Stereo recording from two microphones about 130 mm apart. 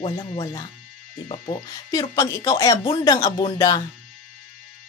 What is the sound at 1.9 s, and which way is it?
A woman's voice, 30° left (ahead or behind).